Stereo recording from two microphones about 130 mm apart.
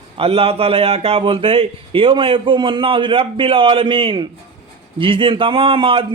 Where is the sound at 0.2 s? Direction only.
50° right (ahead or behind).